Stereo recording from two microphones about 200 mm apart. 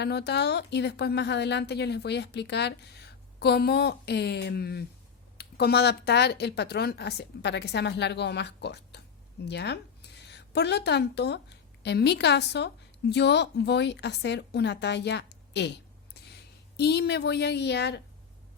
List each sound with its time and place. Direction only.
0.0 s a woman's voice: 55° left (ahead or behind)